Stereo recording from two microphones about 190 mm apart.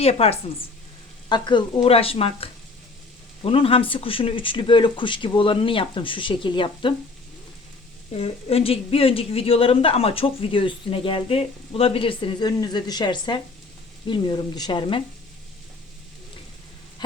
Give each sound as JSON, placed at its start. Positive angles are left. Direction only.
{"t": 0.0, "sound": "speech", "side_deg": 30}
{"t": 8.1, "sound": "speech", "side_deg": 30}